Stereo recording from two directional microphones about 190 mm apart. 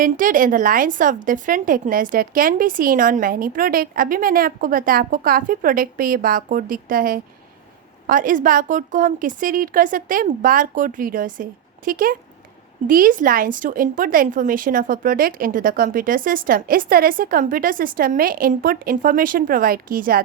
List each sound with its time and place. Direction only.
0.0 s a woman's voice: 45° right (ahead or behind)